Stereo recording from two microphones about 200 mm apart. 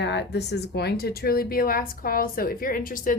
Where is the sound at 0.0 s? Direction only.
60° left (ahead or behind).